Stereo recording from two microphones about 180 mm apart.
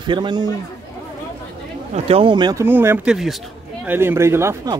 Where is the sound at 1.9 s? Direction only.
35° right (ahead or behind).